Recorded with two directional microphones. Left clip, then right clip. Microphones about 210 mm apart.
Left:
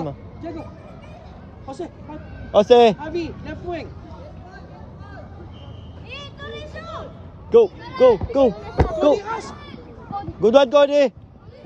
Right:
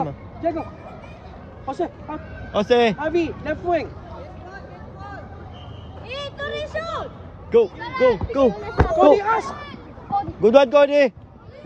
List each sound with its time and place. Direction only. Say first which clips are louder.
0.4 s speech: right 11 dB; 25° right (ahead or behind)
1.7 s speech: right 7 dB; 25° right (ahead or behind)
2.5 s speech: left 5 dB; 15° left (ahead or behind)
3.0 s speech: right 6 dB; 25° right (ahead or behind)
6.0 s speech: right 6 dB; 40° right (ahead or behind)
7.5 s speech: left 3 dB; 10° left (ahead or behind)
8.5 s speech: right 1 dB; centre (ahead or behind)
9.1 s a sound: right 5 dB; 30° right (ahead or behind)
10.4 s speech: even; 5° left (ahead or behind)